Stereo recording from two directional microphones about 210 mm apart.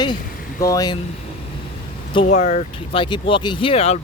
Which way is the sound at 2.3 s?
35° left (ahead or behind).